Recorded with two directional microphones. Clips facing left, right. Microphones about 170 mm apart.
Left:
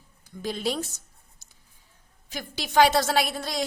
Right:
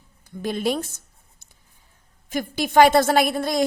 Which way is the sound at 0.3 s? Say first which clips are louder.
Right 5 dB; 55° right (ahead or behind).